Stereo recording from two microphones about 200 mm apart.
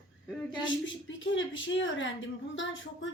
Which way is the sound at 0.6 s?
70° left (ahead or behind).